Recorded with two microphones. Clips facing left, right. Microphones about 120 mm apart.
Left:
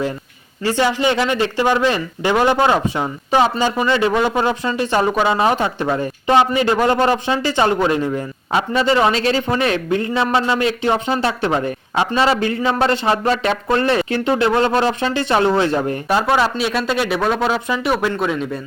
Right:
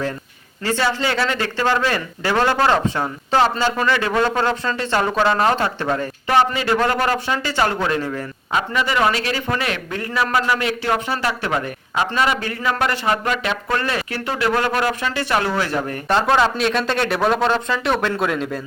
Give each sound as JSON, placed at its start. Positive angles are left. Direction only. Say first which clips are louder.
{"t": 0.6, "sound": "speech", "louder": "left 4 dB", "side_deg": 15}
{"t": 10.1, "sound": "speech", "louder": "left 3 dB", "side_deg": 15}
{"t": 10.3, "sound": "speech", "louder": "left 2 dB", "side_deg": 25}
{"t": 16.0, "sound": "a man's voice", "louder": "right 1 dB", "side_deg": 5}